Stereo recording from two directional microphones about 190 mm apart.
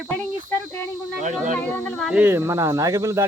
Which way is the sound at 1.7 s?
5° left (ahead or behind).